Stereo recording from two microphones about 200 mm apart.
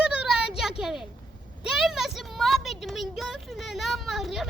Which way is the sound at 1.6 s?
Centre (ahead or behind).